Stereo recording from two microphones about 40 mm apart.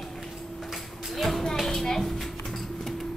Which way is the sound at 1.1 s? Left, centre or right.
Centre.